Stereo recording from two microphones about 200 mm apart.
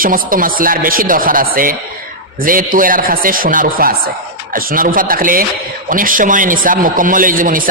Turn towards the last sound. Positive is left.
turn(degrees=-40)  # may be behind; listen again after turning